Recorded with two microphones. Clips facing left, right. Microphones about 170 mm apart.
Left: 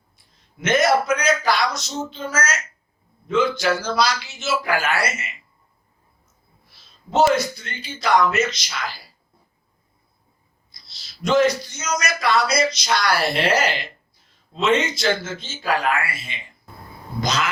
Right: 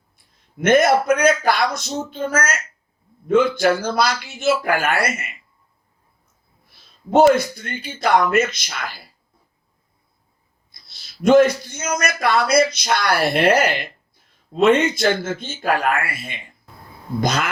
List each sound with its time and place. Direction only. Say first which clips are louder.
0.3 s a man's voice: right 5 dB; 55° right (ahead or behind)
6.7 s a man's voice: right 9 dB; 55° right (ahead or behind)
10.7 s a man's voice: left 1 dB; 55° right (ahead or behind)